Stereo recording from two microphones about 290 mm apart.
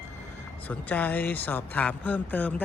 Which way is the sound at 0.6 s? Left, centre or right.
Centre.